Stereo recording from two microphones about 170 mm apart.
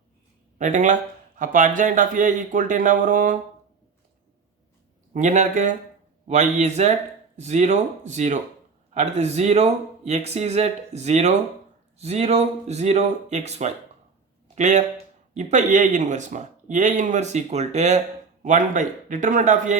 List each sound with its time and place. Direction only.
0.6 s speech: 45° right (ahead or behind)
5.1 s speech: 45° right (ahead or behind)